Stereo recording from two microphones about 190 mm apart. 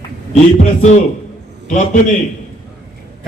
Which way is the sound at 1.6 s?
40° left (ahead or behind).